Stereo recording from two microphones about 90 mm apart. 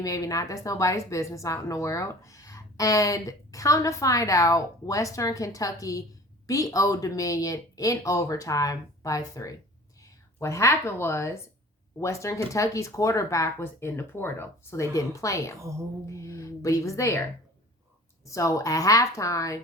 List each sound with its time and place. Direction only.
0.0 s a woman's voice: 40° left (ahead or behind)
18.3 s a woman's voice: 35° left (ahead or behind)